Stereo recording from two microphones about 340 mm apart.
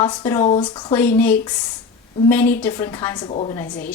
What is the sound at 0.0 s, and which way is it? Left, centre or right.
A woman's voice, centre.